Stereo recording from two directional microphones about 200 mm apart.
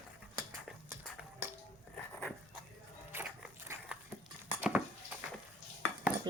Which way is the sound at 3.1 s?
10° right (ahead or behind).